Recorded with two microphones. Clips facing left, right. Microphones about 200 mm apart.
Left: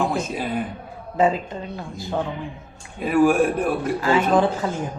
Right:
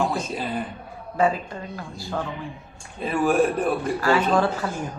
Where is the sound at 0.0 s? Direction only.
15° left (ahead or behind).